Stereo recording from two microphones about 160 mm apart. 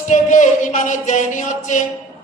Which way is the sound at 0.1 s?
50° left (ahead or behind).